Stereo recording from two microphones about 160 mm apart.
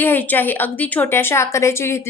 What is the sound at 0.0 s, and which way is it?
A woman's voice, 10° left (ahead or behind).